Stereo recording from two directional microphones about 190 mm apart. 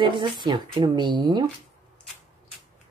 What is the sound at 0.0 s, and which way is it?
Speech, 25° right (ahead or behind).